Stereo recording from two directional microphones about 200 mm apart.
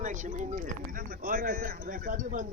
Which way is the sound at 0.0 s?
40° right (ahead or behind).